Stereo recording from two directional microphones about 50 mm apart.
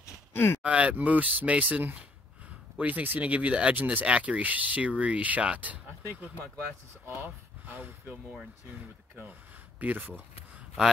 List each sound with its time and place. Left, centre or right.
0.3 s speech: left
0.6 s speech: right
4.0 s speech: right
7.7 s speech: right
9.8 s speech: right